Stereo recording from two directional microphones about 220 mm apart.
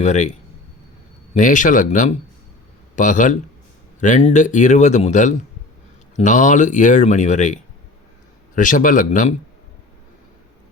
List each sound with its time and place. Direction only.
0.0 s a man's voice: 30° left (ahead or behind)